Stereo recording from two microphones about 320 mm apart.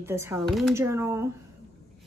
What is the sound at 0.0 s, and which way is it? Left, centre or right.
Speech, centre.